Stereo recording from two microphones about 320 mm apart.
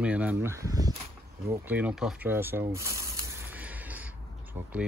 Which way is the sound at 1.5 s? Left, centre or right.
Centre.